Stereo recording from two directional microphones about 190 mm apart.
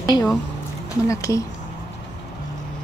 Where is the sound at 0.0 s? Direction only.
20° left (ahead or behind).